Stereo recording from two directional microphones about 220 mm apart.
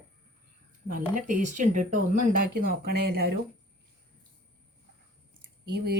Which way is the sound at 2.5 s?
45° right (ahead or behind).